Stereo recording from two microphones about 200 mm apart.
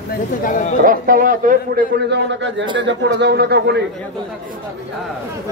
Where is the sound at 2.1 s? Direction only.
65° right (ahead or behind).